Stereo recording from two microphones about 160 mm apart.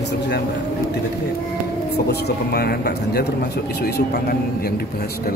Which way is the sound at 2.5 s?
80° left.